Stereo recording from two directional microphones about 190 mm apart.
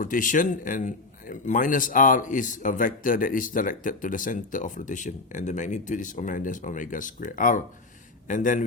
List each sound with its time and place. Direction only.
0.0 s speech: 45° left (ahead or behind)